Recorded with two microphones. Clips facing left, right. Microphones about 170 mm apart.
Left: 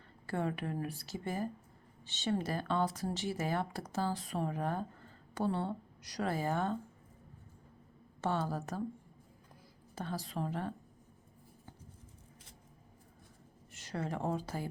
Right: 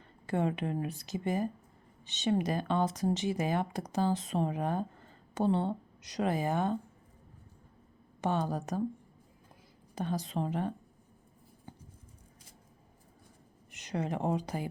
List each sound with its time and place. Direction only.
0.3 s speech: 20° right (ahead or behind)
8.2 s speech: 15° right (ahead or behind)
9.9 s speech: 15° right (ahead or behind)
13.7 s speech: 20° right (ahead or behind)